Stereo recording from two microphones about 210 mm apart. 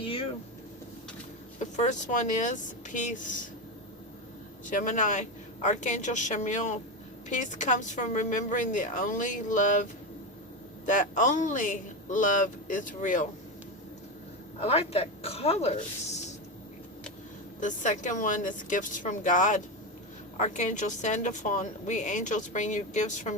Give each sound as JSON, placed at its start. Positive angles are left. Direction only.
{"t": 0.0, "sound": "vehicle", "side_deg": 25}
{"t": 1.5, "sound": "a woman's voice", "side_deg": 35}
{"t": 4.6, "sound": "a woman's voice", "side_deg": 35}
{"t": 10.8, "sound": "a woman's voice", "side_deg": 40}
{"t": 14.6, "sound": "speech", "side_deg": 30}
{"t": 17.6, "sound": "a woman's voice", "side_deg": 35}